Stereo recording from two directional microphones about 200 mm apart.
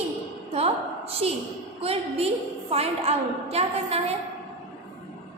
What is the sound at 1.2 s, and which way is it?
A woman's voice, 30° right (ahead or behind).